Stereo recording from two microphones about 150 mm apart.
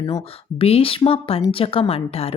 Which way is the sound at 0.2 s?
40° left (ahead or behind).